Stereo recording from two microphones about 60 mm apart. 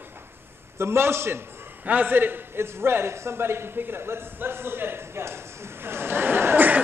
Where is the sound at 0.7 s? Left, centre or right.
Right.